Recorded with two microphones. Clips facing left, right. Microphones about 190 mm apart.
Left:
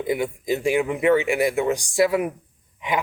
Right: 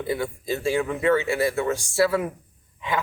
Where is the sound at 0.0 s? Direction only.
15° left (ahead or behind).